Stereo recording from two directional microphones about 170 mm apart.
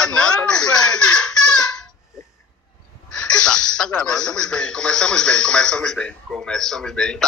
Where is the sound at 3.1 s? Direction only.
5° left (ahead or behind).